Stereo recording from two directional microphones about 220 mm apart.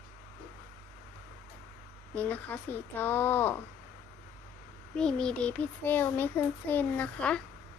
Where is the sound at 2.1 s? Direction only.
5° left (ahead or behind).